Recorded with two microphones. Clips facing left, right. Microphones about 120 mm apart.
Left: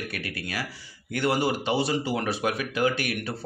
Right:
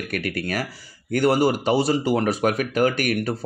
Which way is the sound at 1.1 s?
40° right (ahead or behind).